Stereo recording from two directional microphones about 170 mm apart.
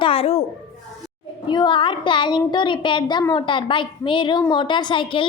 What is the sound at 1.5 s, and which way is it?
A woman's voice, 25° left (ahead or behind).